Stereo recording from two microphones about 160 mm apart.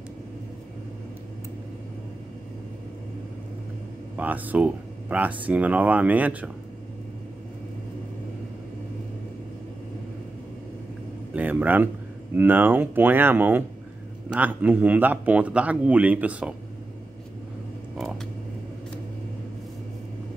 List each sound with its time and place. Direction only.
4.2 s speech: 10° right (ahead or behind)
11.3 s speech: 10° right (ahead or behind)